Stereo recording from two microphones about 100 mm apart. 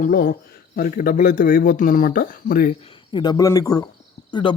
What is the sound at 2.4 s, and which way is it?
Speech, 45° left (ahead or behind).